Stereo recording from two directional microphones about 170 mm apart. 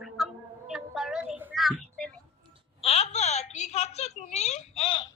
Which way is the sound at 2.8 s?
40° left (ahead or behind).